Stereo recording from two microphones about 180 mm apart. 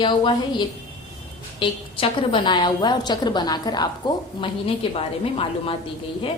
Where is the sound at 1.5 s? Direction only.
30° left (ahead or behind).